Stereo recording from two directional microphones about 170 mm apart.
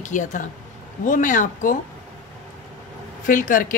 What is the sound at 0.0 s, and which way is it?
A woman's voice, 45° left (ahead or behind).